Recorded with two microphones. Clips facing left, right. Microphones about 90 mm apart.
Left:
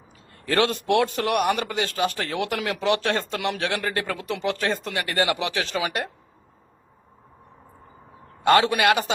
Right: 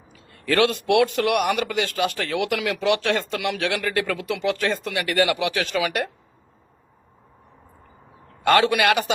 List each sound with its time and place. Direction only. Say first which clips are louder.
0.3 s a man's voice: right 2 dB; 30° left (ahead or behind)
8.4 s a man's voice: even; 30° left (ahead or behind)